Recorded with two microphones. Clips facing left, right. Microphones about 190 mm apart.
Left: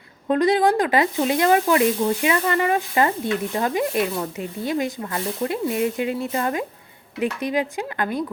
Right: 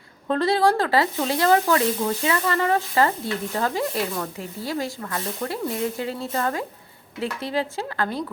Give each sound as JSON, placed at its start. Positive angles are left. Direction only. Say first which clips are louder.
{"t": 0.3, "sound": "speech", "louder": "left 2 dB", "side_deg": 15}